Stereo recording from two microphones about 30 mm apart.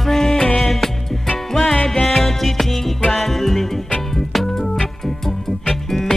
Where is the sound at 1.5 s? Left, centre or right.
Centre.